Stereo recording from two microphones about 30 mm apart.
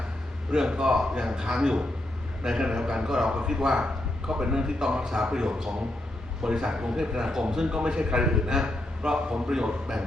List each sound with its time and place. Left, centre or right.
0.5 s a man's voice: right